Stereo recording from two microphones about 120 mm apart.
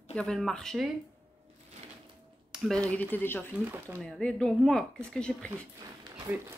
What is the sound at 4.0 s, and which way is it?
A woman's voice, 5° left (ahead or behind).